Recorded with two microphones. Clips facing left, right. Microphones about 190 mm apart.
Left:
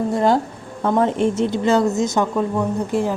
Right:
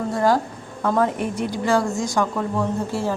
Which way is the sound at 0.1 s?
20° left (ahead or behind).